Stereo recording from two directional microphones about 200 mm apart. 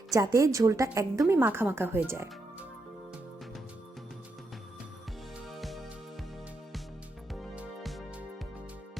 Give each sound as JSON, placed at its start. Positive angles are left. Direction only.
{"t": 0.1, "sound": "speech", "side_deg": -15}
{"t": 5.5, "sound": "music", "side_deg": 0}
{"t": 7.5, "sound": "music", "side_deg": -5}